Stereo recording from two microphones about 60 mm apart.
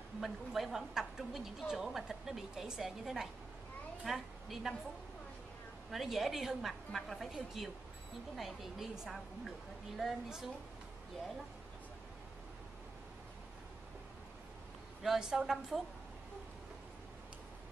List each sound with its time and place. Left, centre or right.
0.2 s a woman's voice: centre
5.9 s a woman's voice: centre
15.0 s speech: centre